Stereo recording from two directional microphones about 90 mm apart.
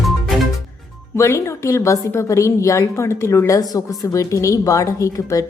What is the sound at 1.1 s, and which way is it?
A woman's voice, 30° left (ahead or behind).